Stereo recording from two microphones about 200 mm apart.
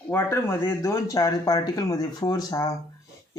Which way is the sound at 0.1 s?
10° left (ahead or behind).